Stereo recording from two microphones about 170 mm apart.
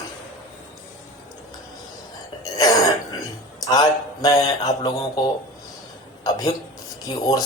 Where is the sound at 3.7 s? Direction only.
20° left (ahead or behind).